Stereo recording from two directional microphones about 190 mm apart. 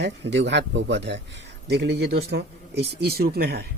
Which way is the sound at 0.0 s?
65° right (ahead or behind).